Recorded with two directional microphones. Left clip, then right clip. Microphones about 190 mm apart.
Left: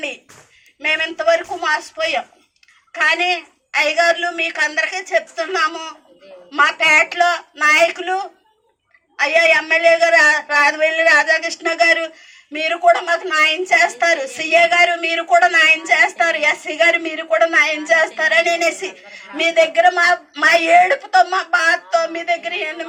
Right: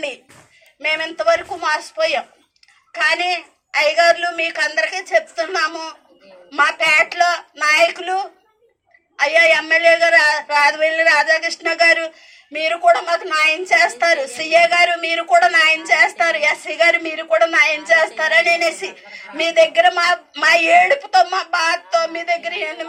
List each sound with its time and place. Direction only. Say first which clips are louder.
0.8 s a man's voice: left 1 dB; 30° left (ahead or behind)